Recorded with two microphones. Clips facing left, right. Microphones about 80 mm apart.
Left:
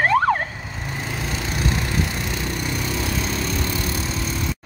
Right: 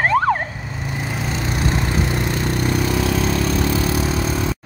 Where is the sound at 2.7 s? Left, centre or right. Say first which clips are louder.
Right 8 dB; right.